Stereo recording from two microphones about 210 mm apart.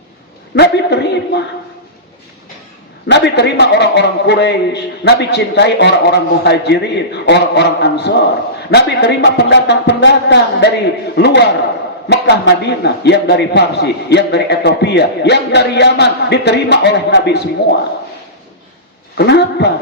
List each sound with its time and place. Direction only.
0.5 s a man's voice: 55° left (ahead or behind)
3.1 s a man's voice: 55° left (ahead or behind)
19.1 s a man's voice: 55° left (ahead or behind)